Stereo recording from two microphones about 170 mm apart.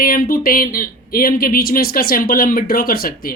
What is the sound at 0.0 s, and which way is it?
Speech, 60° left (ahead or behind).